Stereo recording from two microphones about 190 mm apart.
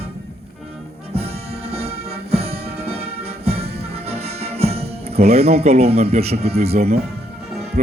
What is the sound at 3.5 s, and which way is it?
Music, 30° right (ahead or behind).